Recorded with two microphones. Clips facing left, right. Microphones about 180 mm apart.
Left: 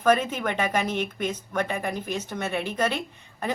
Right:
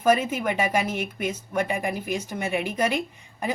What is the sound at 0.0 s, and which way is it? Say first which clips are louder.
Speech: right 1 dB; 10° right (ahead or behind).